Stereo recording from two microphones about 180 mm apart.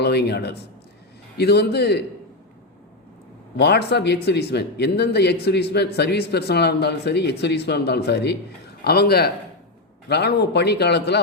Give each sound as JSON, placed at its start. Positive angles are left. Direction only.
{"t": 0.0, "sound": "a man's voice", "side_deg": 65}
{"t": 3.6, "sound": "a man's voice", "side_deg": 65}